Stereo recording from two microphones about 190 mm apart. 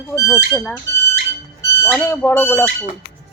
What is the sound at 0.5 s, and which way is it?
Speech, centre (ahead or behind).